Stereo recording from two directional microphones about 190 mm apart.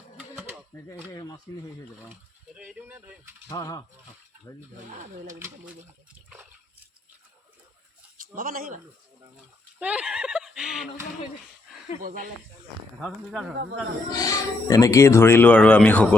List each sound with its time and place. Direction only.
0.2 s a sound: 5° right (ahead or behind)
1.1 s speech: 20° left (ahead or behind)
2.6 s speech: 5° right (ahead or behind)
3.5 s speech: 20° left (ahead or behind)
4.9 s speech: 40° right (ahead or behind)
8.4 s speech: 50° right (ahead or behind)
9.8 s speech: 5° right (ahead or behind)
12.0 s speech: 45° right (ahead or behind)
13.0 s speech: centre (ahead or behind)
14.2 s speech: 20° left (ahead or behind)